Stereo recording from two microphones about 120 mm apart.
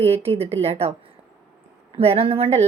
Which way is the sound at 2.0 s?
55° right (ahead or behind).